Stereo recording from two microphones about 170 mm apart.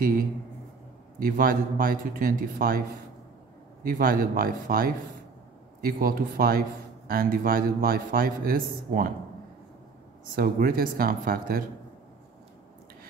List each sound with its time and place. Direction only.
1.2 s a man's voice: 55° right (ahead or behind)
3.8 s a man's voice: 55° right (ahead or behind)
10.3 s a man's voice: 60° right (ahead or behind)